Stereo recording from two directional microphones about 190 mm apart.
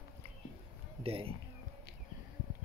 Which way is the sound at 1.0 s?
30° right (ahead or behind).